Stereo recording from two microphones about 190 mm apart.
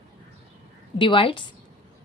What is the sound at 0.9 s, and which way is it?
Speech, 25° left (ahead or behind).